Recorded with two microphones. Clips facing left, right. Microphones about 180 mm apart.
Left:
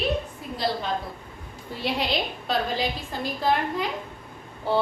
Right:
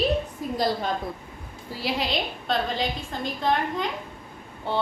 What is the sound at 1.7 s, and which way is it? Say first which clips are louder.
A woman's voice: left 1 dB; centre (ahead or behind).